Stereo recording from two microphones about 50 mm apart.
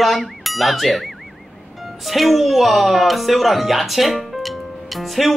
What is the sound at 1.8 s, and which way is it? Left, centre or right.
Speech, centre.